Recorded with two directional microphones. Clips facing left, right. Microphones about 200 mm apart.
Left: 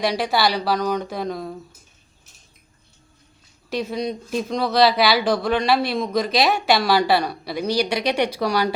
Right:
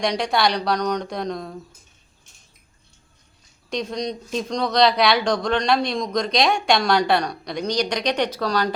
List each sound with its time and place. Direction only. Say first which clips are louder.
0.0 s speech: even; 5° left (ahead or behind)
3.7 s speech: left 1 dB; 5° left (ahead or behind)